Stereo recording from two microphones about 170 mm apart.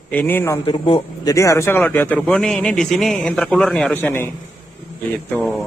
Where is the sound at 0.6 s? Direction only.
30° left (ahead or behind); by 4.2 s 10° left (ahead or behind).